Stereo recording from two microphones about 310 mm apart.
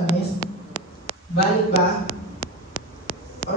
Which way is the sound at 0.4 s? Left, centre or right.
Left.